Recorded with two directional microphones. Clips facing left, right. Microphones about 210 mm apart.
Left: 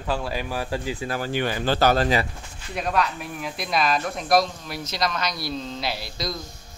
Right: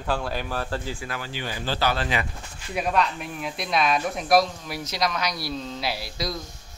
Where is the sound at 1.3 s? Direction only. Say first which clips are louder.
Left 6 dB; 60° left (ahead or behind); by 2.3 s 40° left (ahead or behind).